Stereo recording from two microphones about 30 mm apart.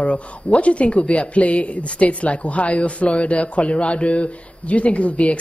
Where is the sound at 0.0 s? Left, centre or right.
Left.